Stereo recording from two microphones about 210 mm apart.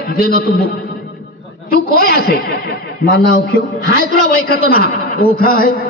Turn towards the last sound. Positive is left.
turn(degrees=45)  # may be behind; listen again after turning